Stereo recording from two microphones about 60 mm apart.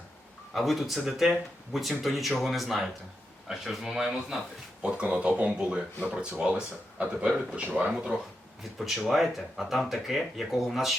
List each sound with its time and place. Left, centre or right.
0.5 s speech: centre
4.8 s speech: centre
8.8 s speech: centre